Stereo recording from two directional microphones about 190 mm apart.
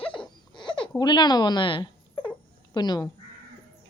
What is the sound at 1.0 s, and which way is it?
A woman's voice, 20° left (ahead or behind).